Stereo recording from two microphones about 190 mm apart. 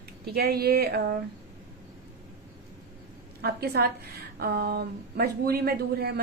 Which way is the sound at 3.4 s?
55° right (ahead or behind).